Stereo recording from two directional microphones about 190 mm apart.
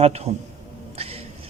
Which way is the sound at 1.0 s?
30° right (ahead or behind).